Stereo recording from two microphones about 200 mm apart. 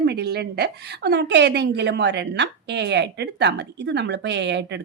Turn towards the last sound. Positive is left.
turn(degrees=-60)  # may be behind; listen again after turning